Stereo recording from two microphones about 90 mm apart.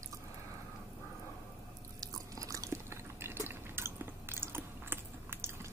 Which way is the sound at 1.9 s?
40° right (ahead or behind).